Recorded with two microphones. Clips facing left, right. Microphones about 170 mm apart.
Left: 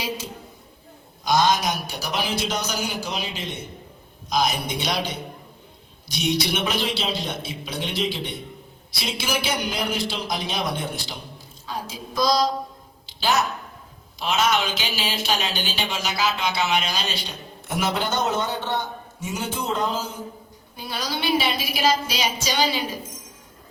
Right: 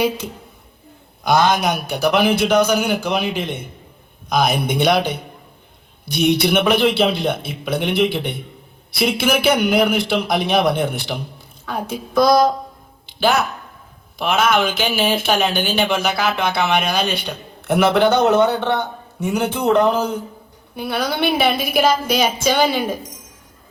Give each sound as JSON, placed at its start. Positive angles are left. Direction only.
{"t": 1.2, "sound": "speech", "side_deg": -60}
{"t": 13.1, "sound": "a sound", "side_deg": -55}
{"t": 14.2, "sound": "speech", "side_deg": -55}